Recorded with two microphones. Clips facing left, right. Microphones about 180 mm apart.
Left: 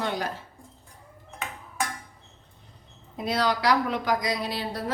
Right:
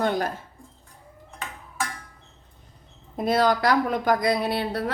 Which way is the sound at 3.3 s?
50° right (ahead or behind).